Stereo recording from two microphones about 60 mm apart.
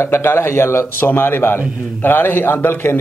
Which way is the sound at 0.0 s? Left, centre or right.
Left.